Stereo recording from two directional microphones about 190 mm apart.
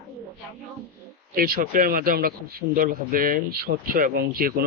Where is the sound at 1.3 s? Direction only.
50° right (ahead or behind).